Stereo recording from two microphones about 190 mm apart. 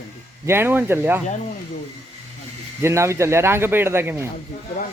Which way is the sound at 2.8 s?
15° right (ahead or behind).